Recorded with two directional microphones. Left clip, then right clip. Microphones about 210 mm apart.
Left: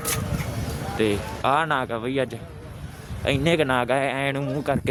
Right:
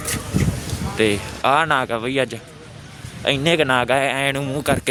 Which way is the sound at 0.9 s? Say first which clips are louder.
Right 5 dB; 15° right (ahead or behind).